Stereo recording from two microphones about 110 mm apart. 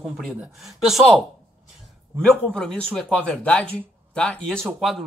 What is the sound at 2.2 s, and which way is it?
Speech, 5° left (ahead or behind).